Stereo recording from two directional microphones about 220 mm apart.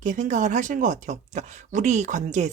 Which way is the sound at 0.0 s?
35° right (ahead or behind).